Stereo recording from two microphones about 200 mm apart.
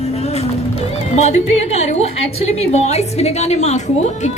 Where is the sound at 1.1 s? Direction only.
35° left (ahead or behind).